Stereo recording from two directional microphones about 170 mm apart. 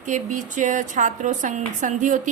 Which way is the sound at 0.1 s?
50° right (ahead or behind).